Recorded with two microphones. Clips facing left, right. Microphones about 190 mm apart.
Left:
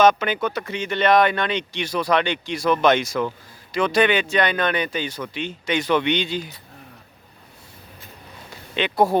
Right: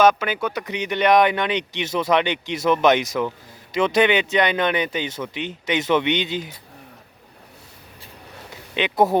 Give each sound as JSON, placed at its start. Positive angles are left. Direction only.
{"t": 0.0, "sound": "speech", "side_deg": -10}
{"t": 8.7, "sound": "speech", "side_deg": -20}